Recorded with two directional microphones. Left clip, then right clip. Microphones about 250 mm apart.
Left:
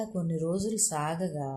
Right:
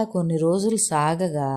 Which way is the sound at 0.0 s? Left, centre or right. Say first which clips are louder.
Right 10 dB; right.